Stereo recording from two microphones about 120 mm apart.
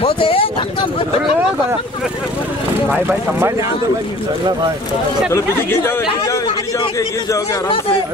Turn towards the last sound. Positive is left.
turn(degrees=25)  # may be behind; listen again after turning